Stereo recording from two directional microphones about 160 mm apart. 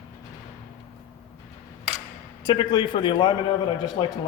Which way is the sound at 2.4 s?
30° left (ahead or behind).